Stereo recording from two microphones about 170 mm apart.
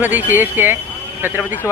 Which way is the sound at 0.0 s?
10° right (ahead or behind).